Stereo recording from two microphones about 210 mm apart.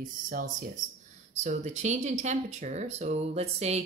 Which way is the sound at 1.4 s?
35° right (ahead or behind).